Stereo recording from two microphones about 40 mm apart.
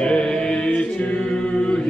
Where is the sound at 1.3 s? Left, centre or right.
Left.